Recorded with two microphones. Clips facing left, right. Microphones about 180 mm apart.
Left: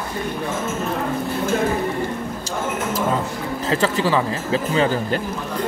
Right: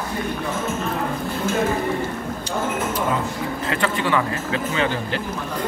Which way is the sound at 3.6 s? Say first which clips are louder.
Left 4 dB; 30° left (ahead or behind).